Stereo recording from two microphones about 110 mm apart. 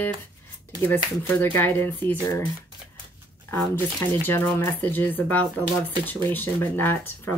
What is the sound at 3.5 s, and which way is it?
Speech, 20° left (ahead or behind).